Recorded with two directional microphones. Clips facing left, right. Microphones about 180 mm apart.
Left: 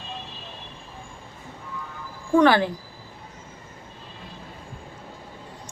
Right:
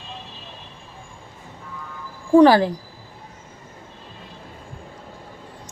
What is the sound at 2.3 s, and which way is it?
Speech, 35° right (ahead or behind).